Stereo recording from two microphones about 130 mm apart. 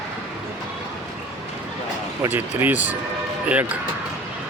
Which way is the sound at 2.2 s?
15° right (ahead or behind).